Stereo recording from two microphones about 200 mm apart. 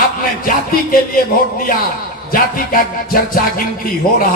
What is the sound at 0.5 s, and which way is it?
Speech, 45° left (ahead or behind).